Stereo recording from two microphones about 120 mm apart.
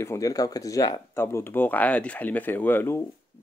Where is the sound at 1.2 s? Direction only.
15° left (ahead or behind).